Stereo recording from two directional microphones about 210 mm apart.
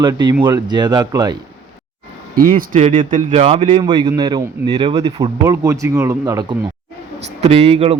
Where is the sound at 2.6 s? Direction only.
35° right (ahead or behind); by 6.5 s 15° right (ahead or behind).